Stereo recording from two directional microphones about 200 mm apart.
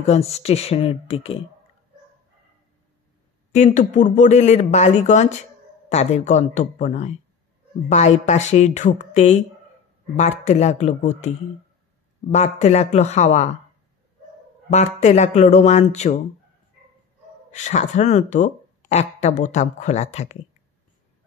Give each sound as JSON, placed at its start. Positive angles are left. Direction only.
{"t": 0.0, "sound": "speech", "side_deg": 30}
{"t": 3.5, "sound": "speech", "side_deg": 35}
{"t": 14.7, "sound": "speech", "side_deg": 35}
{"t": 17.5, "sound": "speech", "side_deg": 35}